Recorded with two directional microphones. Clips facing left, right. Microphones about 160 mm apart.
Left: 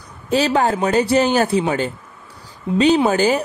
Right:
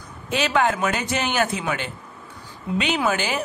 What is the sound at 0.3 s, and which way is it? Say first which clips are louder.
Speech: left 4 dB; 35° left (ahead or behind).